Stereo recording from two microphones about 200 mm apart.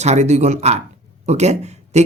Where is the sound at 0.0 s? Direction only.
35° right (ahead or behind).